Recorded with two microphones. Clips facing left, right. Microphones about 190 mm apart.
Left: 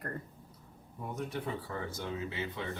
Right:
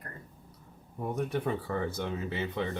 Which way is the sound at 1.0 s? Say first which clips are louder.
Right 6 dB; 60° right (ahead or behind).